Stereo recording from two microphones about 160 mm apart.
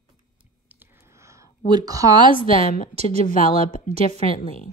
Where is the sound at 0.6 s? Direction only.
10° right (ahead or behind).